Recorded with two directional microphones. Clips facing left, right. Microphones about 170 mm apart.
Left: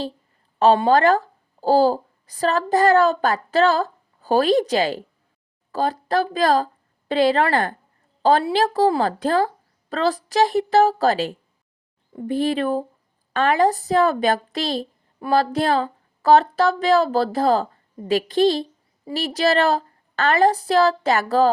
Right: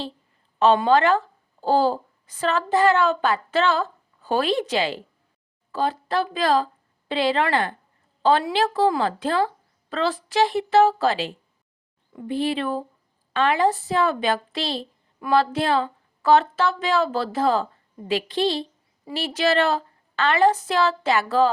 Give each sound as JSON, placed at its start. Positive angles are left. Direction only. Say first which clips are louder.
{"t": 0.6, "sound": "a woman's voice", "louder": "left 2 dB", "side_deg": 40}